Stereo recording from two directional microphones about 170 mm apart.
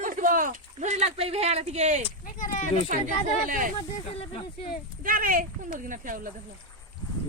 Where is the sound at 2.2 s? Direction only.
50° left (ahead or behind).